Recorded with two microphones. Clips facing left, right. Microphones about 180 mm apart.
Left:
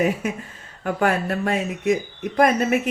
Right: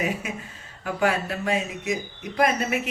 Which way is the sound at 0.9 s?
50° left (ahead or behind).